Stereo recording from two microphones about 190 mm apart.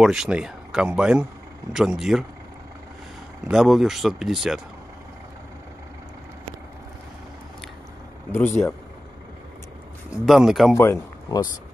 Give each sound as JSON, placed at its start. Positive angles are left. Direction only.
{"t": 0.0, "sound": "speech", "side_deg": 0}
{"t": 3.4, "sound": "speech", "side_deg": 0}
{"t": 8.3, "sound": "speech", "side_deg": 10}
{"t": 10.1, "sound": "speech", "side_deg": 0}
{"t": 10.8, "sound": "speech", "side_deg": 15}